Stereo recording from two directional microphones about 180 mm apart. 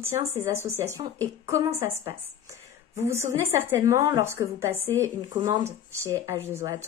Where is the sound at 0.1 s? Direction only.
15° right (ahead or behind).